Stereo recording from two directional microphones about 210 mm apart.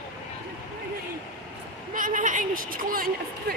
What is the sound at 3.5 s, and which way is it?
Speech, 45° right (ahead or behind).